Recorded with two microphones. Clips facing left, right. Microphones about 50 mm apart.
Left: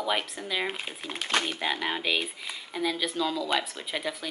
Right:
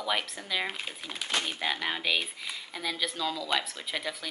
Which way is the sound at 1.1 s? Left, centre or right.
Left.